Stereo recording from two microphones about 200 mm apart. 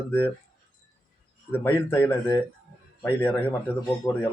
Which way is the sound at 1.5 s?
10° left (ahead or behind).